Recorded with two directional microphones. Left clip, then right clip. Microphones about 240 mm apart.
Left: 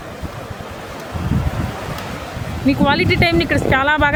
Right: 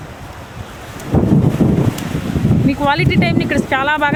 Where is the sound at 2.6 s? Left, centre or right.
Centre.